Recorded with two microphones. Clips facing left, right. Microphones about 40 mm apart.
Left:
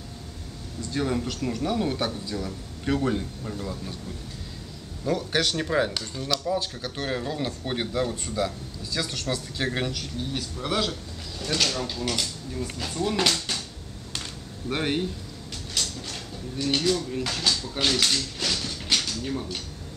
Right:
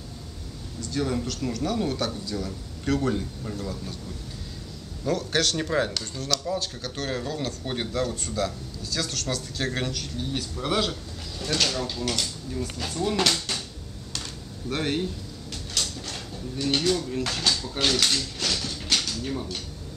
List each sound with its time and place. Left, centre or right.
0.8 s speech: centre
5.0 s speech: centre
10.1 s speech: centre
14.7 s speech: centre
15.8 s a sound: centre